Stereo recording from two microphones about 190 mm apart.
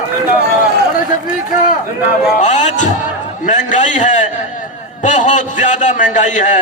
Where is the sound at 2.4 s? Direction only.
40° left (ahead or behind).